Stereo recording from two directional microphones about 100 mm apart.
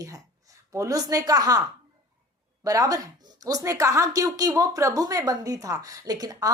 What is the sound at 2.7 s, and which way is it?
Speech, 35° right (ahead or behind).